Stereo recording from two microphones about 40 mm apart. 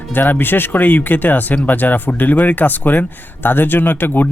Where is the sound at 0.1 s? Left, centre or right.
Left.